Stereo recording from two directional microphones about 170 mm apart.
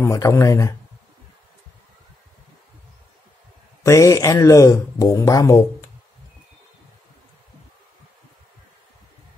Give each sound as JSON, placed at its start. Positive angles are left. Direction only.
{"t": 0.0, "sound": "speech", "side_deg": 20}
{"t": 3.8, "sound": "speech", "side_deg": 20}